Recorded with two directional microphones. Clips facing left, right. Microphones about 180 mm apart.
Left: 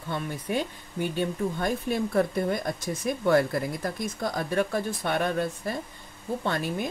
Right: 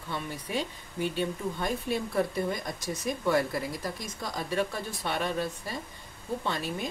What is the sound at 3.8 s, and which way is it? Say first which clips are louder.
Speech: left 6 dB; 55° left (ahead or behind).